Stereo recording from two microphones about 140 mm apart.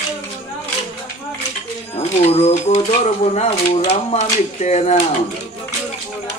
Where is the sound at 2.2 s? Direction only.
50° left (ahead or behind).